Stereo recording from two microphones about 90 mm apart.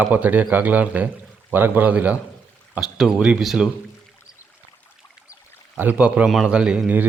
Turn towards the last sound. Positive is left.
turn(degrees=-15)  # may be behind; listen again after turning